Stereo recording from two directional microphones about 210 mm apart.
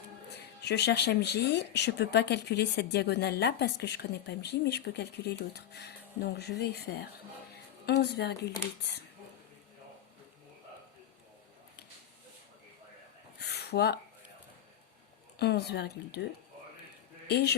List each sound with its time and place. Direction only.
0.6 s speech: 55° left (ahead or behind)
13.4 s a sound: 50° left (ahead or behind)
15.4 s speech: 50° left (ahead or behind)
17.2 s speech: 50° left (ahead or behind)